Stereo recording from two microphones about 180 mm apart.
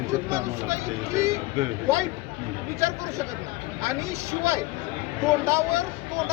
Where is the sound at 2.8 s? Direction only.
15° right (ahead or behind).